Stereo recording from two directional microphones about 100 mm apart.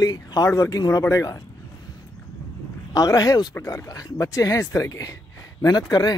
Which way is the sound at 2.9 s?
35° left (ahead or behind).